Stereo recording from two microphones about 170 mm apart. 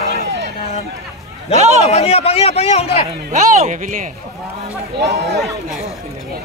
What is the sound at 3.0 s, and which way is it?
Speech, 40° right (ahead or behind).